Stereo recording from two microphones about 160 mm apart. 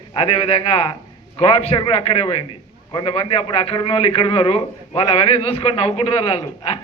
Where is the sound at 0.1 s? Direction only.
35° left (ahead or behind).